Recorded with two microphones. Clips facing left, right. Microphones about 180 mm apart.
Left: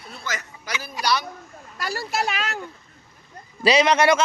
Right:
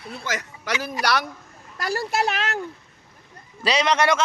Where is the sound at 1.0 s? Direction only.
80° right.